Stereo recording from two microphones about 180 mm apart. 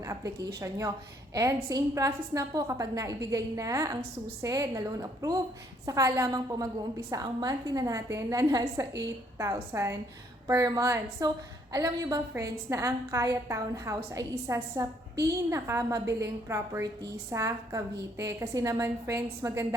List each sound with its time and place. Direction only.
0.0 s a woman's voice: 15° right (ahead or behind)